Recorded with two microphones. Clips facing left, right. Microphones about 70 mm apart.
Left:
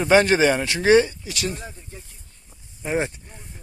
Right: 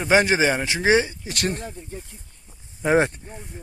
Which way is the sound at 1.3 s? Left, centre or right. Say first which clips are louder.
Right 3 dB; right.